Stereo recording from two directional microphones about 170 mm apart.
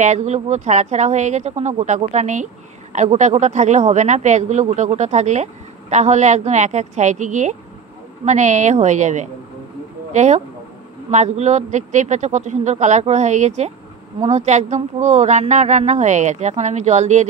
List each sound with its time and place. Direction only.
0.0 s a woman's voice: 45° right (ahead or behind)